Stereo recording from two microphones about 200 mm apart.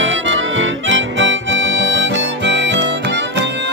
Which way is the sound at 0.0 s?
70° right (ahead or behind).